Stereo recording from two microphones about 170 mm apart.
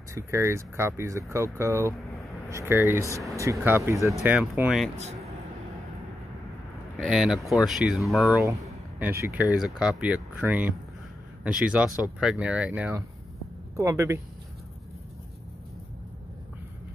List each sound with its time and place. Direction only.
0.1 s speech: 15° right (ahead or behind); by 4.9 s centre (ahead or behind)
4.9 s speech: 40° right (ahead or behind)
7.0 s speech: centre (ahead or behind); by 14.2 s 15° right (ahead or behind)